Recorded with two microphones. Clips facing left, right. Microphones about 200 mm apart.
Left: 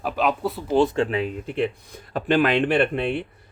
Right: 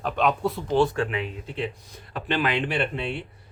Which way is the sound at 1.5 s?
55° left (ahead or behind).